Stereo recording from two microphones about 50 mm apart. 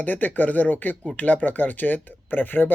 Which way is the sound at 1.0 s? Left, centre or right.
Left.